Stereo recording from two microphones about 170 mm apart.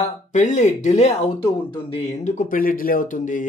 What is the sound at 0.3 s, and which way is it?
Speech, 45° left (ahead or behind).